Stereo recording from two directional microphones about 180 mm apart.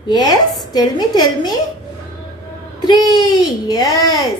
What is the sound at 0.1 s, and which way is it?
A woman's voice, 20° left (ahead or behind).